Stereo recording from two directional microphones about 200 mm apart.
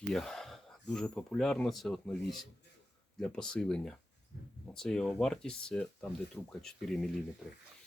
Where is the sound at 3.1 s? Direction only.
5° left (ahead or behind).